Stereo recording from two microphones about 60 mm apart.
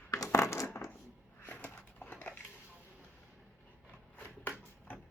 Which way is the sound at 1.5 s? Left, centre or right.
Left.